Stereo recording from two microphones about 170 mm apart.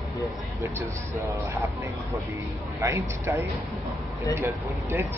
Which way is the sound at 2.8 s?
15° right (ahead or behind).